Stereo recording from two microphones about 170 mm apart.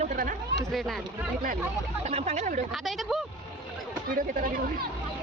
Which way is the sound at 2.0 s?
40° right (ahead or behind).